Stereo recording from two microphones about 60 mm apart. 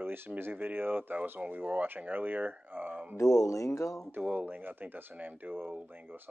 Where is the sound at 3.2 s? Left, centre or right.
Left.